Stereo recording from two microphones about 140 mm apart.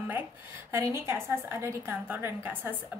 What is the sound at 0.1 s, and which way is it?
A woman's voice, 15° right (ahead or behind).